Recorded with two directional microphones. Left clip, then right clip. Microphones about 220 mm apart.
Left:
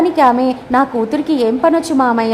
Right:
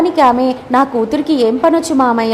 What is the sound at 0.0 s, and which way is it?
A woman's voice, centre (ahead or behind).